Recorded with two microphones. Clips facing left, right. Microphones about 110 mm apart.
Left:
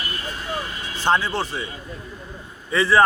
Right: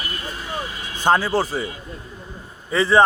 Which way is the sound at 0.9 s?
45° right (ahead or behind).